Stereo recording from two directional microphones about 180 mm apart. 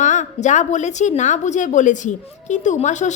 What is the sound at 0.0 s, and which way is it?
A woman's voice, 40° left (ahead or behind).